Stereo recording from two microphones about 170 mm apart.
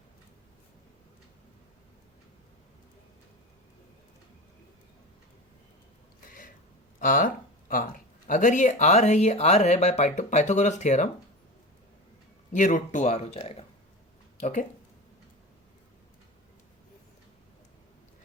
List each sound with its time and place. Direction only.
6.2 s a sound: 55° left (ahead or behind)
7.0 s speech: 55° left (ahead or behind)
12.5 s speech: 45° left (ahead or behind)
14.3 s speech: 45° left (ahead or behind)